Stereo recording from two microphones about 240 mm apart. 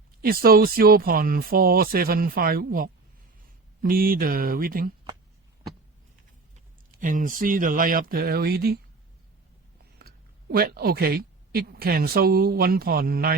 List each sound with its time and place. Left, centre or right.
0.2 s speech: right
7.0 s speech: right
10.0 s speech: right